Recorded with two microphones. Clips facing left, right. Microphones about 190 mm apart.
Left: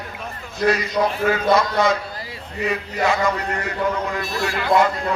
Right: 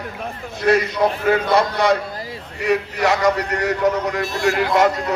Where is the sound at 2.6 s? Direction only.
70° right (ahead or behind).